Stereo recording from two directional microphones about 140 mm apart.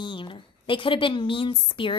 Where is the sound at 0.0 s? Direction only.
35° left (ahead or behind).